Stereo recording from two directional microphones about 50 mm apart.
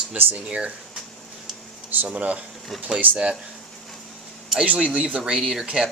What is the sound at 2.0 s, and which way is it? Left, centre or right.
Speech, right.